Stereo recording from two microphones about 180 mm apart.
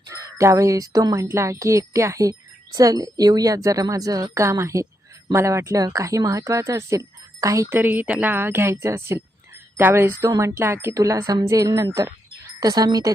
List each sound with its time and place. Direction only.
0.1 s music: 15° right (ahead or behind)
2.7 s a woman's voice: 20° right (ahead or behind)
5.3 s music: 15° right (ahead or behind)
12.5 s speech: 20° right (ahead or behind)